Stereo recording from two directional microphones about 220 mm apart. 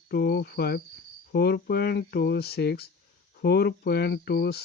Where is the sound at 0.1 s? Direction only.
45° left (ahead or behind).